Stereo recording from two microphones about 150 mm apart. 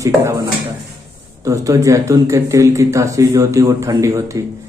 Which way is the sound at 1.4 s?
20° right (ahead or behind).